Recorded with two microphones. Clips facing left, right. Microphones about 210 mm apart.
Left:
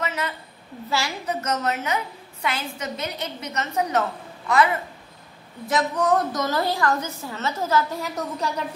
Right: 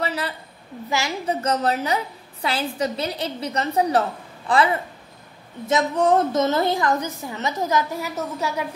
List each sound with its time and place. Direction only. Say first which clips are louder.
0.0 s a sound: right 2 dB; 35° right (ahead or behind)
0.8 s a woman's voice: right 2 dB; 20° right (ahead or behind)
5.7 s a woman's voice: right 3 dB; 25° right (ahead or behind); by 8.6 s 10° right (ahead or behind)